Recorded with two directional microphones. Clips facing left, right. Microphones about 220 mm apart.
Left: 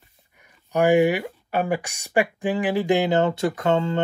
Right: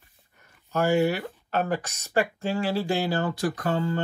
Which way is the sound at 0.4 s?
15° left (ahead or behind).